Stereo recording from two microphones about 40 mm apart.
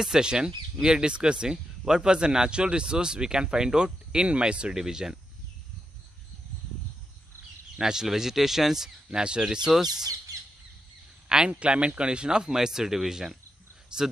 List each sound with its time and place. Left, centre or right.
0.0 s speech: centre
4.7 s speech: centre
7.8 s speech: centre
9.2 s speech: right
9.7 s speech: centre
11.2 s speech: centre
11.6 s speech: right; by 13.4 s centre